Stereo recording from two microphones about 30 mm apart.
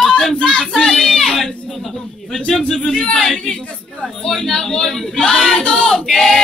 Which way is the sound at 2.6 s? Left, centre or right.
Left.